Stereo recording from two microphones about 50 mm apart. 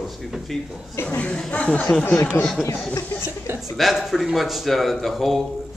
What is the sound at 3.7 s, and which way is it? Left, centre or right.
Speech, centre.